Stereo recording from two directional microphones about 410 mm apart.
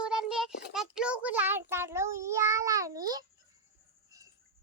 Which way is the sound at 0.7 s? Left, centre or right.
Centre.